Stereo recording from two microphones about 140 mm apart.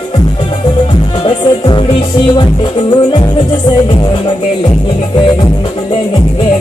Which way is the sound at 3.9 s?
35° left (ahead or behind).